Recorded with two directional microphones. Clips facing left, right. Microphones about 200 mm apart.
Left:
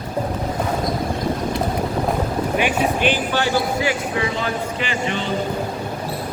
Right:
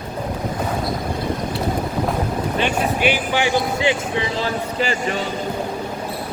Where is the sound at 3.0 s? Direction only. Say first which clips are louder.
Even; 15° right (ahead or behind); by 4.9 s 35° right (ahead or behind).